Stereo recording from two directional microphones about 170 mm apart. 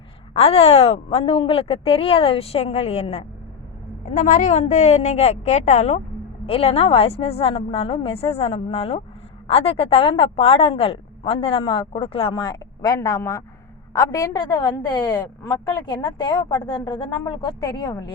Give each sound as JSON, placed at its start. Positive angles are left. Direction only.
{"t": 0.3, "sound": "a woman's voice", "side_deg": 35}
{"t": 4.1, "sound": "a woman's voice", "side_deg": 50}